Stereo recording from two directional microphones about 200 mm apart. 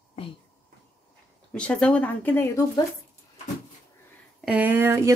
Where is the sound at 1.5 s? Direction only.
5° left (ahead or behind).